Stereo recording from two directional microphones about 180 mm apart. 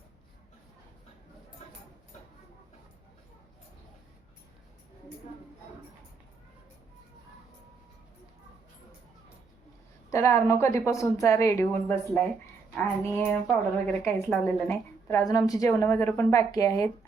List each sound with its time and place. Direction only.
10.1 s a woman's voice: 15° left (ahead or behind)